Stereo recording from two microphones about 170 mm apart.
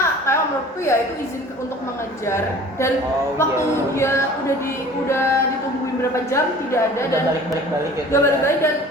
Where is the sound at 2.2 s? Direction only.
15° left (ahead or behind).